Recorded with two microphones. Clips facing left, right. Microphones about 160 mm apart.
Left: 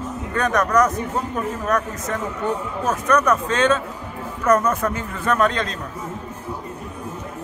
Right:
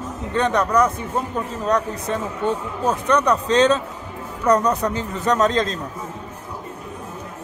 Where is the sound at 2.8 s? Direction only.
30° right (ahead or behind).